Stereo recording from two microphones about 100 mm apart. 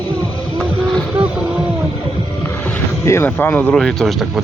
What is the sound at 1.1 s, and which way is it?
Vehicle, 10° right (ahead or behind).